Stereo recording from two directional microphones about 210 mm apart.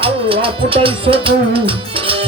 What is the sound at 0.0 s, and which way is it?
Music, 25° right (ahead or behind).